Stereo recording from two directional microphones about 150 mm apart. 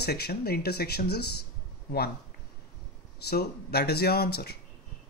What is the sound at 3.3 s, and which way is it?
Speech, 90° left.